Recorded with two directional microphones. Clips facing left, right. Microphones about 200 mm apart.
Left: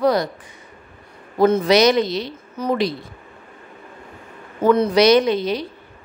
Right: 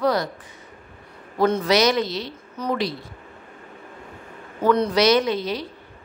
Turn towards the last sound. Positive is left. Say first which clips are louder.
# left 4 dB
turn(degrees=20)  # may be behind; listen again after turning